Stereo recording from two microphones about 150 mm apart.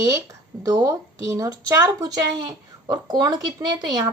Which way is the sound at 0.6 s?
25° right (ahead or behind).